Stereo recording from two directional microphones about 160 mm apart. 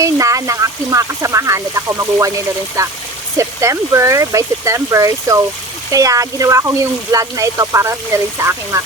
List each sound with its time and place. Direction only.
0.0 s speech: 20° right (ahead or behind)